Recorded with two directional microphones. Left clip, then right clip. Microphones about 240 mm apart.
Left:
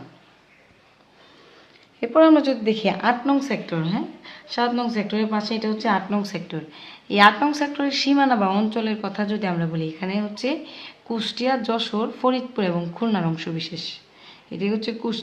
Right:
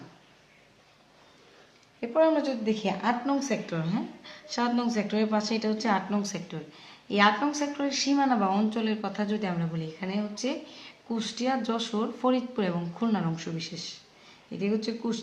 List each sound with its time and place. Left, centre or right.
2.0 s a woman's voice: left